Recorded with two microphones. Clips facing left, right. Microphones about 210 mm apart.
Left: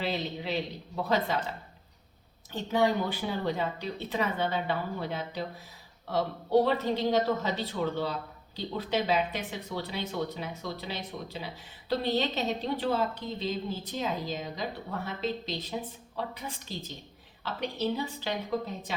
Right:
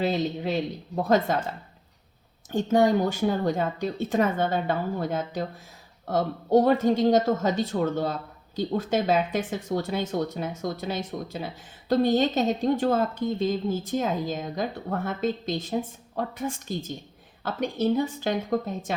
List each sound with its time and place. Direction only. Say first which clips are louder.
0.0 s speech: right 7 dB; 45° right (ahead or behind)
2.5 s speech: right 6 dB; 45° right (ahead or behind)